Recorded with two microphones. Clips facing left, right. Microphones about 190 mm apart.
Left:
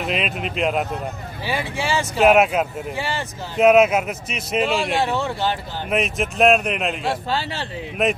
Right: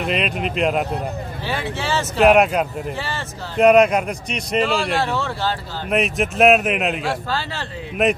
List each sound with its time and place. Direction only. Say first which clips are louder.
0.0 s a man's voice: right 2 dB; centre (ahead or behind)
5.0 s speech: left 1 dB; 15° left (ahead or behind)
5.9 s a man's voice: right 2 dB; centre (ahead or behind)
7.2 s a man's voice: left 1 dB; 20° left (ahead or behind)
8.0 s a man's voice: right 2 dB; centre (ahead or behind)